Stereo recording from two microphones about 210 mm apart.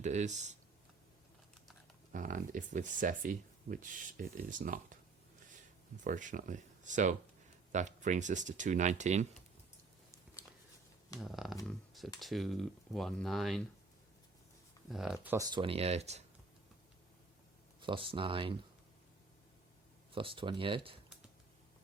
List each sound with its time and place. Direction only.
0.0 s speech: 35° right (ahead or behind)
2.1 s speech: 40° right (ahead or behind)
6.1 s speech: 40° right (ahead or behind)
10.4 s a sound: 10° right (ahead or behind)
11.2 s speech: centre (ahead or behind)
14.8 s speech: centre (ahead or behind); by 16.2 s 30° right (ahead or behind)
17.7 s speech: 25° right (ahead or behind)
20.1 s speech: 25° right (ahead or behind)